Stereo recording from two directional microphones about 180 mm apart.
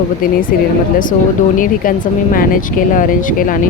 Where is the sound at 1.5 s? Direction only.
50° left (ahead or behind).